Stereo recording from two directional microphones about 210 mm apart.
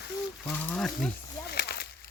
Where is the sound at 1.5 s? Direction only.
50° left (ahead or behind).